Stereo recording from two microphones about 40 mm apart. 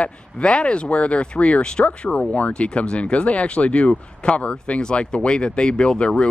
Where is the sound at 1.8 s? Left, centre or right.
Left.